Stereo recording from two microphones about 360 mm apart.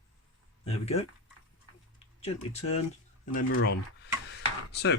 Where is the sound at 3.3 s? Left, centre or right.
Left.